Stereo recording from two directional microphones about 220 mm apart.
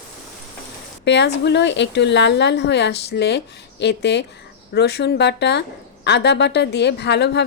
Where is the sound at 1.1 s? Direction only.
50° left (ahead or behind).